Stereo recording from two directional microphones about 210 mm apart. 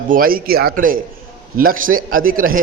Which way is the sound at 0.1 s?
45° right (ahead or behind).